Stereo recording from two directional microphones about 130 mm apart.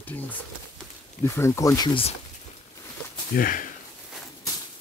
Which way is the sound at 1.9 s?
45° left (ahead or behind).